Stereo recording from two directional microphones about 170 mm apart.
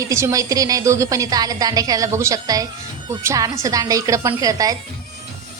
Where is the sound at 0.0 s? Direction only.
15° right (ahead or behind).